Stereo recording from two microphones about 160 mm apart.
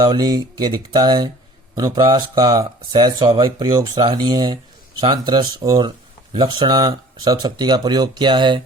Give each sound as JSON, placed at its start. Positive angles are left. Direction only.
{"t": 0.0, "sound": "speech", "side_deg": -25}